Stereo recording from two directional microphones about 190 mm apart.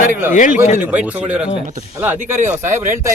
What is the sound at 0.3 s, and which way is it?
Speech, 45° left (ahead or behind).